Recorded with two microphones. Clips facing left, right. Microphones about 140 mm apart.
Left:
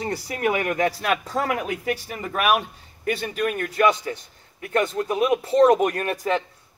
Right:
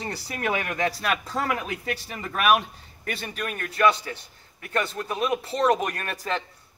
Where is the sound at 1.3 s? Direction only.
35° left (ahead or behind).